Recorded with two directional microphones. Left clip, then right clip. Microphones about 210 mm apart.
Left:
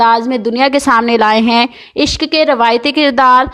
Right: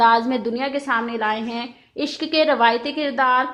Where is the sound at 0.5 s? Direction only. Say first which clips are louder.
Left 16 dB; 50° left (ahead or behind).